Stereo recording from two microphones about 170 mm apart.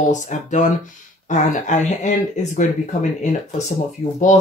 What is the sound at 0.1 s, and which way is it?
Speech, 45° left (ahead or behind).